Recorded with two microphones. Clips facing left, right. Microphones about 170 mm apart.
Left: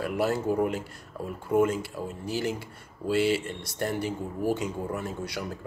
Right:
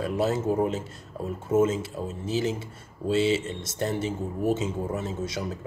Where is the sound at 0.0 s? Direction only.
20° right (ahead or behind).